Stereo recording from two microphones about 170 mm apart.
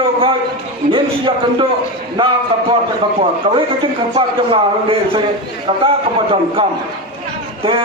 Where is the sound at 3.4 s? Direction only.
35° right (ahead or behind).